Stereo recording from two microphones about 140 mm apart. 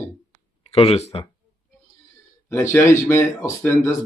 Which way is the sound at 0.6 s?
45° left (ahead or behind).